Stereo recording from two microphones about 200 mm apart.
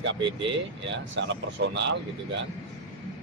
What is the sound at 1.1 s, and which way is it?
A man's voice, 60° right (ahead or behind).